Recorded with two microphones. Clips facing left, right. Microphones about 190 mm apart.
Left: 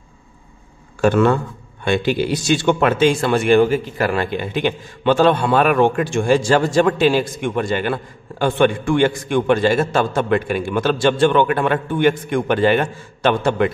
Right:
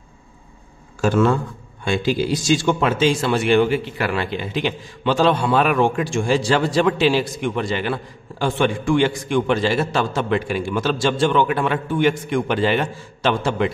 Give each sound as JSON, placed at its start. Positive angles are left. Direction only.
{"t": 1.0, "sound": "a man's voice", "side_deg": 60}